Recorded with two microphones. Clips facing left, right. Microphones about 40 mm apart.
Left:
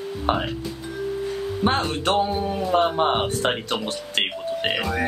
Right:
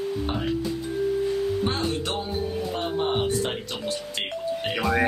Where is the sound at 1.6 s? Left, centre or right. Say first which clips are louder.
Left 5 dB; left.